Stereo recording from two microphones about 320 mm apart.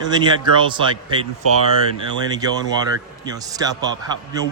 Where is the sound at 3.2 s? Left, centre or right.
Centre.